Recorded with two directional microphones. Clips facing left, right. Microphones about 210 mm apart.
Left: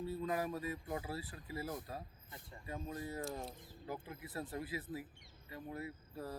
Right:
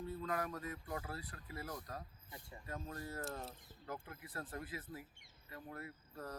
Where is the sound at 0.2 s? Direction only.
20° left (ahead or behind).